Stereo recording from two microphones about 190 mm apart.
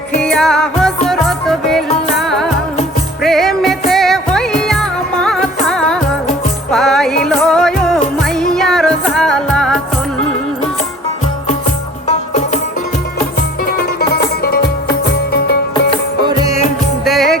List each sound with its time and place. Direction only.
0.2 s music: 5° left (ahead or behind)
14.4 s music: 55° left (ahead or behind)
16.2 s music: 20° right (ahead or behind)
17.1 s music: centre (ahead or behind)